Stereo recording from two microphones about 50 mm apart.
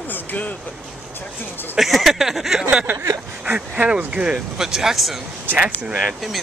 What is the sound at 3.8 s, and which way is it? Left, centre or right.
Speech, right.